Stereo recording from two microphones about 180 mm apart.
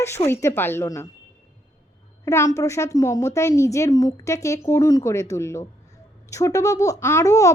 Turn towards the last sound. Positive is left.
turn(degrees=15)  # may be behind; listen again after turning